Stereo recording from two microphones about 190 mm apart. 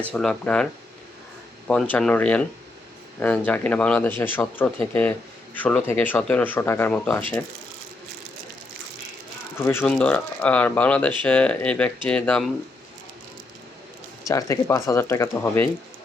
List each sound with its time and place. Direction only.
0.1 s speech: 5° left (ahead or behind)
9.6 s speech: 10° left (ahead or behind)
14.3 s speech: 15° left (ahead or behind)